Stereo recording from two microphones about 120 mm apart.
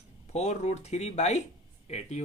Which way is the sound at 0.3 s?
65° left (ahead or behind).